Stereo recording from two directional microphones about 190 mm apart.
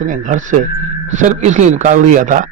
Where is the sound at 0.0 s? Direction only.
40° right (ahead or behind).